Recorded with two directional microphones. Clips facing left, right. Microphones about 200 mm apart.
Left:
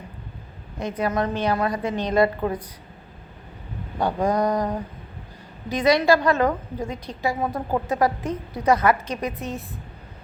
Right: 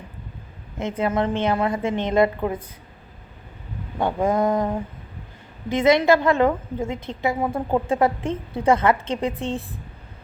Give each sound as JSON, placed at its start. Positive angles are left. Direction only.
{"t": 0.8, "sound": "a woman's voice", "side_deg": -25}
{"t": 4.0, "sound": "a woman's voice", "side_deg": -25}